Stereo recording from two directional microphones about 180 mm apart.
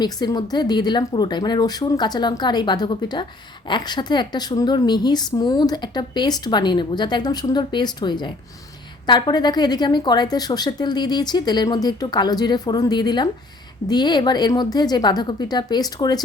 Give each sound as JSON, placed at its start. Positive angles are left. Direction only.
{"t": 0.0, "sound": "a woman's voice", "side_deg": 25}